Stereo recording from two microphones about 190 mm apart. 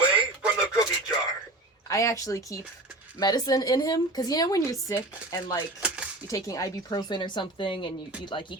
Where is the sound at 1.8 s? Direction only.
15° left (ahead or behind).